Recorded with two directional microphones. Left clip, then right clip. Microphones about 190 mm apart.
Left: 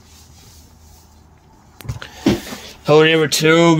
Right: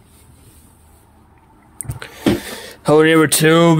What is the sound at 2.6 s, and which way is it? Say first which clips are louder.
Speech: even; 45° right (ahead or behind).